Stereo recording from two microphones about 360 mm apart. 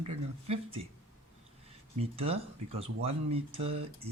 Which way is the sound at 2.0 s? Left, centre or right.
Centre.